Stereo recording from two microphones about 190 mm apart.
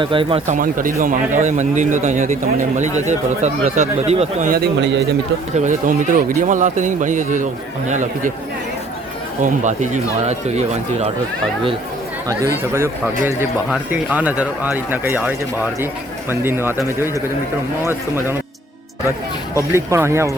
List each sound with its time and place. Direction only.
0.0 s speech: 25° right (ahead or behind); by 5.0 s 65° right (ahead or behind)
5.5 s speech: 40° right (ahead or behind)
9.4 s speech: 40° right (ahead or behind)
12.6 s speech: 15° right (ahead or behind)
19.5 s speech: 15° right (ahead or behind)